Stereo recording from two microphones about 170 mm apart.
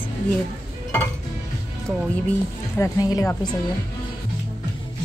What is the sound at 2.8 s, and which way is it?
Speech, 20° left (ahead or behind).